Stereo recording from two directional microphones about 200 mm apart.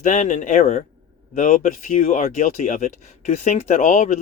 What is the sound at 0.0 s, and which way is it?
Speech, 40° left (ahead or behind).